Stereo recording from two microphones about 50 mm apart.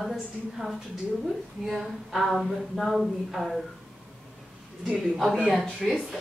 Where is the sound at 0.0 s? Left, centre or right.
Centre.